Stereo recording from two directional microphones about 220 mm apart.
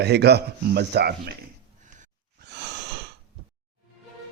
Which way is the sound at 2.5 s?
50° right (ahead or behind).